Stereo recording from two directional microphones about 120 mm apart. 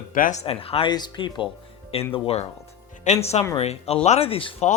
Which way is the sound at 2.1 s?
55° left (ahead or behind).